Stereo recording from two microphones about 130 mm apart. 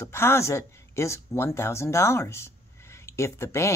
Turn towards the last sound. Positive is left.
turn(degrees=20)  # may be behind; listen again after turning